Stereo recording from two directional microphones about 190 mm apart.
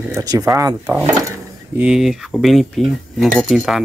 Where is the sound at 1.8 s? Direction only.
5° right (ahead or behind).